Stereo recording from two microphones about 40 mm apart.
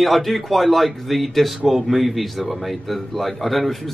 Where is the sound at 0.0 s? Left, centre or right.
Centre.